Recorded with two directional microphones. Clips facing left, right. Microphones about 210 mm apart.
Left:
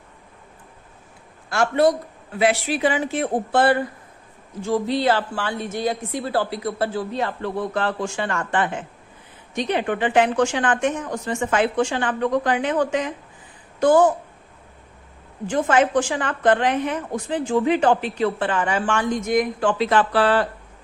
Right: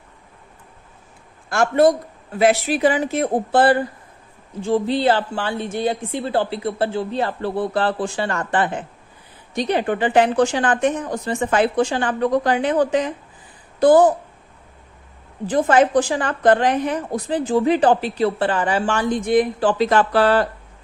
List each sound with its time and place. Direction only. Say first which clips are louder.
1.5 s a man's voice: right 3 dB; 45° right (ahead or behind)
15.4 s a woman's voice: right 3 dB; 35° right (ahead or behind)